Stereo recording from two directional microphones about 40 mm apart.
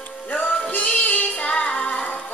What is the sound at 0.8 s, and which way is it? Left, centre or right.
Music, left.